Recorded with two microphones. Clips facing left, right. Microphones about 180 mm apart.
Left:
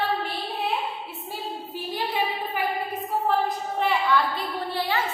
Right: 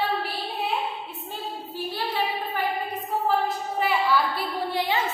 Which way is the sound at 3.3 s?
5° right (ahead or behind).